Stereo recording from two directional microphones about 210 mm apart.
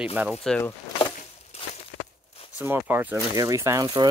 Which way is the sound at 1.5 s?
30° left (ahead or behind).